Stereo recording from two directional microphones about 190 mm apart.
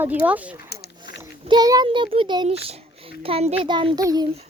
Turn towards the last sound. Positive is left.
turn(degrees=-20)  # may be behind; listen again after turning